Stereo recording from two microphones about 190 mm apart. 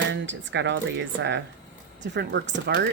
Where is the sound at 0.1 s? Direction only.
70° right (ahead or behind).